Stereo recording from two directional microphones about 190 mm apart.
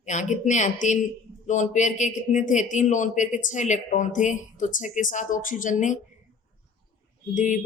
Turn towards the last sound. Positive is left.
turn(degrees=40)  # may be behind; listen again after turning